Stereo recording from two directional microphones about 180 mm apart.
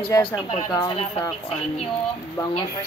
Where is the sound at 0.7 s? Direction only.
30° left (ahead or behind).